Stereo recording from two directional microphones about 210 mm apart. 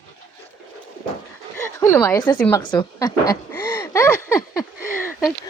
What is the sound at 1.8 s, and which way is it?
A woman's voice, 10° left (ahead or behind).